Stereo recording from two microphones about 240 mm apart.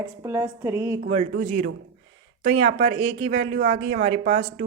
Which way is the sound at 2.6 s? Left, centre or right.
Right.